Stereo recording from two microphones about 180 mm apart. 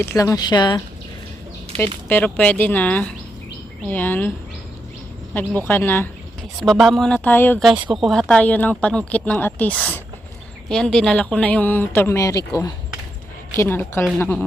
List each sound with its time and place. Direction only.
0.0 s speech: 15° left (ahead or behind)
2.0 s speech: 10° left (ahead or behind)
5.3 s speech: 10° left (ahead or behind)
6.6 s speech: centre (ahead or behind); by 12.4 s 15° left (ahead or behind)
13.6 s speech: 10° left (ahead or behind)